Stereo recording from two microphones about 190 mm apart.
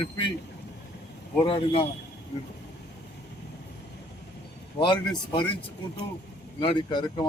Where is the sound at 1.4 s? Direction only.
30° left (ahead or behind).